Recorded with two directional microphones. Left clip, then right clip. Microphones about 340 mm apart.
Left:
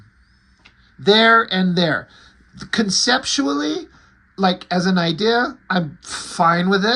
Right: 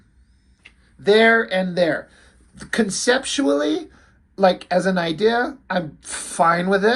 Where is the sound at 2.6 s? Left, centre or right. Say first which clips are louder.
Left 3 dB; centre.